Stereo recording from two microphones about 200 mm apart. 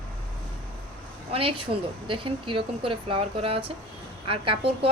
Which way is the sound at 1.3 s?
30° right (ahead or behind).